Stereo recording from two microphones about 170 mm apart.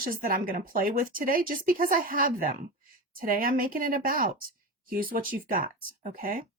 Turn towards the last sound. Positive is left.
turn(degrees=-55)  # may be behind; listen again after turning